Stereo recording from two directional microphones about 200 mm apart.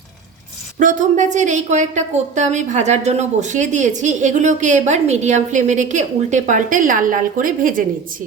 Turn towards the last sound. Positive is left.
turn(degrees=-45)  # may be behind; listen again after turning